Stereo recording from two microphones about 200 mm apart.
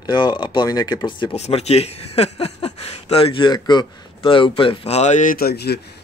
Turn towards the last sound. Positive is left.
turn(degrees=55)  # may be behind; listen again after turning